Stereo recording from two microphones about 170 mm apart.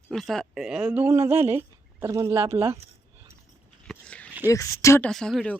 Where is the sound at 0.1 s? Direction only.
Centre (ahead or behind); by 2.7 s 15° right (ahead or behind).